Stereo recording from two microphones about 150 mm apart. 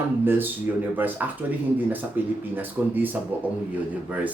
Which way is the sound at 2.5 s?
10° right (ahead or behind).